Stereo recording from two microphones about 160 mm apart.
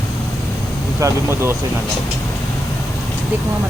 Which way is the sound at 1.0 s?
15° right (ahead or behind).